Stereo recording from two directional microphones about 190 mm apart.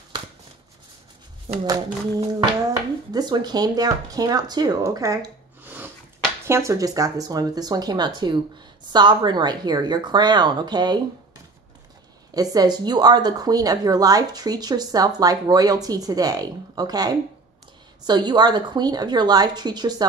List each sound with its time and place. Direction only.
1.7 s speech: 20° right (ahead or behind)
12.4 s speech: 20° right (ahead or behind)